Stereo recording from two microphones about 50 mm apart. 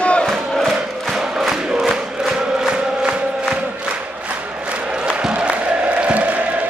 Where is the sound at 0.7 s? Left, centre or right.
Centre.